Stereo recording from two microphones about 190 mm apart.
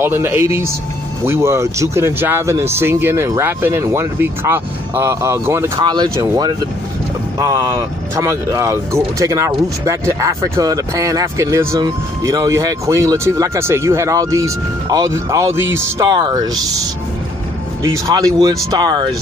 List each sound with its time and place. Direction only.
0.0 s speech: 10° right (ahead or behind)
17.9 s speech: 20° right (ahead or behind)